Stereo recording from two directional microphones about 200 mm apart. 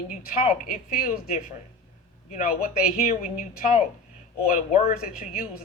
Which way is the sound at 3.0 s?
35° left (ahead or behind).